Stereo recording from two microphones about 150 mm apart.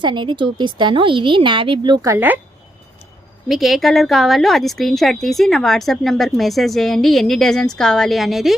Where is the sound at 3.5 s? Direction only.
Centre (ahead or behind).